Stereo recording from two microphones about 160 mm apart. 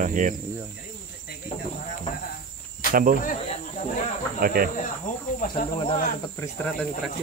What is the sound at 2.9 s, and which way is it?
Speech, 60° right (ahead or behind).